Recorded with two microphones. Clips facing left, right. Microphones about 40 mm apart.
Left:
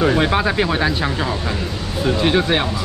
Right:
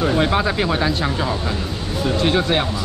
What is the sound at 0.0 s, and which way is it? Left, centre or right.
Speech, centre.